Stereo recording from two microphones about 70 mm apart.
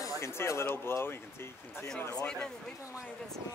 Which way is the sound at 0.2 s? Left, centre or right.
Left.